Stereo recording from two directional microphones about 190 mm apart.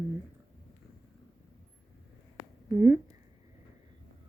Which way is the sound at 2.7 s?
10° right (ahead or behind).